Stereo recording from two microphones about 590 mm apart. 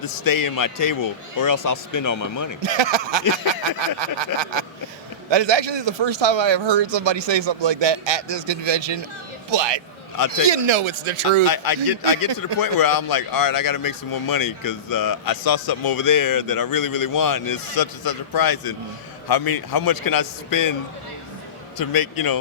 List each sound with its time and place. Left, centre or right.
0.0 s speech: left
2.6 s speech: right
11.4 s speech: left
21.8 s speech: left